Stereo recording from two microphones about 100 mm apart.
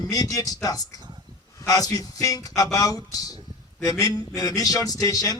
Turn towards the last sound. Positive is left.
turn(degrees=35)  # may be behind; listen again after turning